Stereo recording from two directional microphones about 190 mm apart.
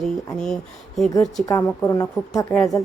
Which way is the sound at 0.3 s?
5° left (ahead or behind).